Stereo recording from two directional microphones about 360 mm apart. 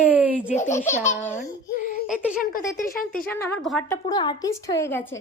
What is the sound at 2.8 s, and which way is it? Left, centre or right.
Speech, left.